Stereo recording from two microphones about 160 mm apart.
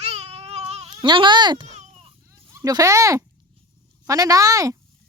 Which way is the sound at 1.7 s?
45° right (ahead or behind).